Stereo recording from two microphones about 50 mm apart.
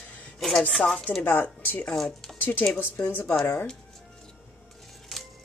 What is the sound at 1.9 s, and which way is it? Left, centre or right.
Speech, centre.